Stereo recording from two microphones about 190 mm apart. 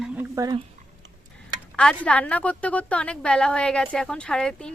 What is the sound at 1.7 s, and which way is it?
Speech, 5° left (ahead or behind).